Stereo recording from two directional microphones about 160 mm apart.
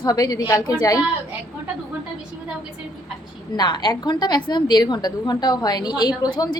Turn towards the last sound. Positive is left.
turn(degrees=25)  # may be behind; listen again after turning